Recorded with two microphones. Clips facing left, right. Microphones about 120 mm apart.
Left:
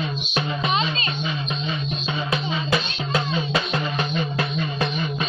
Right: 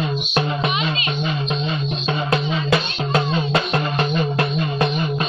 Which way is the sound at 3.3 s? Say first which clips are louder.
Right 4 dB; 50° right (ahead or behind).